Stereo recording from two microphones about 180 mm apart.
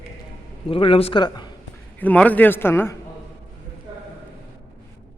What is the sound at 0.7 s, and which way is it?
Speech, 30° left (ahead or behind).